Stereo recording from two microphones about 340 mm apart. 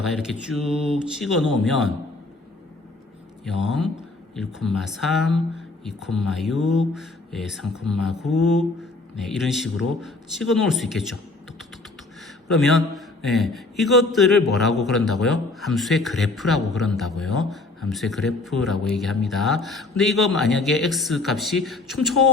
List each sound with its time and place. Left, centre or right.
0.0 s a man's voice: centre
3.4 s a man's voice: centre
12.5 s a man's voice: centre